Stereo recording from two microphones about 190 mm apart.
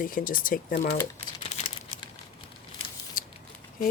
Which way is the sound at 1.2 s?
35° left (ahead or behind).